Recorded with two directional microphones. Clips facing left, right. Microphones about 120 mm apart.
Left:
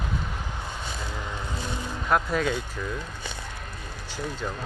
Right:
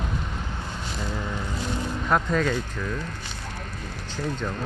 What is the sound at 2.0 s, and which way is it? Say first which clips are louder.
Speech: right 1 dB; 5° left (ahead or behind).